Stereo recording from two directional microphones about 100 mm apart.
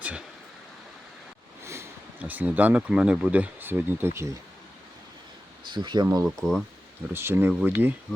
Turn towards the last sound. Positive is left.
turn(degrees=-20)  # may be behind; listen again after turning